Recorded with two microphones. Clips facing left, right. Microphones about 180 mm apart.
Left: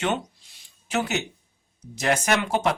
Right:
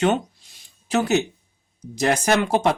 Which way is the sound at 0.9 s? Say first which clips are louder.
Right 6 dB; 40° right (ahead or behind).